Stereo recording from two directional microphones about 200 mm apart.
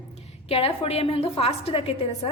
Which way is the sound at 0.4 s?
30° left (ahead or behind).